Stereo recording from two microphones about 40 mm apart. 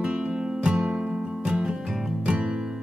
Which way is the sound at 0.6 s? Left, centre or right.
Right.